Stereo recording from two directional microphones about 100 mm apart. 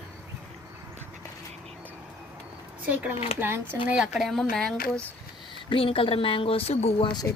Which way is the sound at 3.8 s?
10° right (ahead or behind).